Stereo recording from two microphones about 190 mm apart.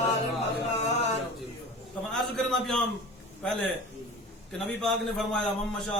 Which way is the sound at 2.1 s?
5° left (ahead or behind).